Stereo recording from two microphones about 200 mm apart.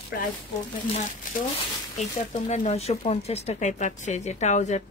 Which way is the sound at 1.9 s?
35° left (ahead or behind).